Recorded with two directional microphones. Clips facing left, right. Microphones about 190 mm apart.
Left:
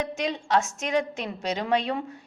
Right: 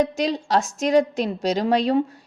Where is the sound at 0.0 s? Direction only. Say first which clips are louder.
Right 7 dB; 35° right (ahead or behind).